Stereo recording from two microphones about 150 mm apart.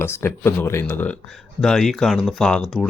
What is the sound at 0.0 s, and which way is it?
Speech, 15° left (ahead or behind).